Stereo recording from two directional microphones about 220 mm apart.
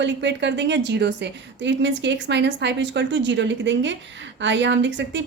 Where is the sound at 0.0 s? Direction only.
55° right (ahead or behind).